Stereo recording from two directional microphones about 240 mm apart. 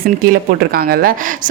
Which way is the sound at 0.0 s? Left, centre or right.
Right.